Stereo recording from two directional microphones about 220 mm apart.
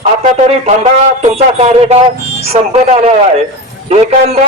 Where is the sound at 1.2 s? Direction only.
30° right (ahead or behind).